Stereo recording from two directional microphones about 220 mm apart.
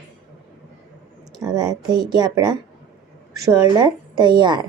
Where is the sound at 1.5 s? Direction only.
20° right (ahead or behind).